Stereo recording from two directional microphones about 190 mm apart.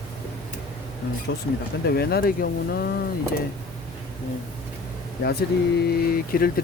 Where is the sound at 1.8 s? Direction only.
55° left (ahead or behind).